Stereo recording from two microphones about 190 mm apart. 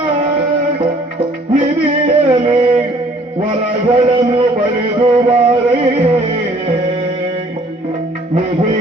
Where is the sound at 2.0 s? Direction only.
30° right (ahead or behind).